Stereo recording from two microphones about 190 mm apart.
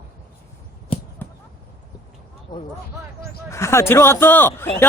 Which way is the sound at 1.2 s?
10° left (ahead or behind).